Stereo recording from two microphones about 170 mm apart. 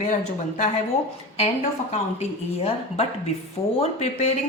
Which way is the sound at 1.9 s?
40° left (ahead or behind).